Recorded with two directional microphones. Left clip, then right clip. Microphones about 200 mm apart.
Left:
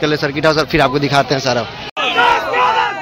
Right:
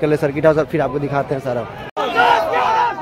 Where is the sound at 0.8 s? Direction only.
5° left (ahead or behind).